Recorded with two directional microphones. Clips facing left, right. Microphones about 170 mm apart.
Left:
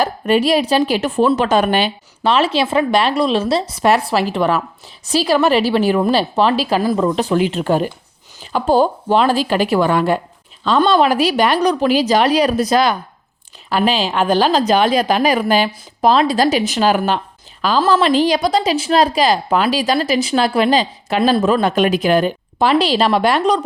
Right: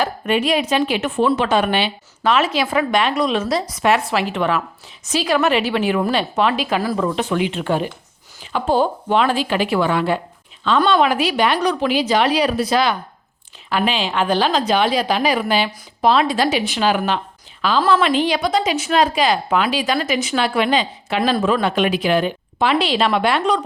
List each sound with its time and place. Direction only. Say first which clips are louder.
0.0 s a woman's voice: left 4 dB; 35° left (ahead or behind)
2.2 s a woman's voice: left 2 dB; 30° left (ahead or behind)
6.8 s speech: left 4 dB; 20° left (ahead or behind)
7.2 s a woman's voice: left 4 dB; 35° left (ahead or behind)